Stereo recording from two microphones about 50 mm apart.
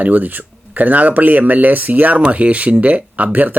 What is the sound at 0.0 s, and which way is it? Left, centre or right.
Speech, right.